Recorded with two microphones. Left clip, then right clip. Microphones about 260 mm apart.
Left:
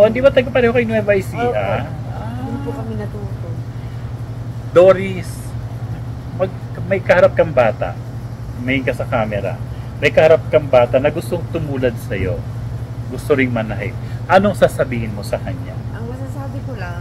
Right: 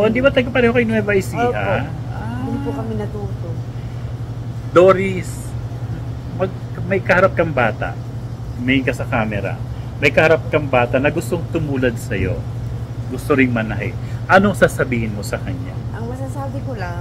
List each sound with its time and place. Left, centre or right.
0.0 s a man's voice: centre
4.7 s a man's voice: centre
6.4 s a man's voice: centre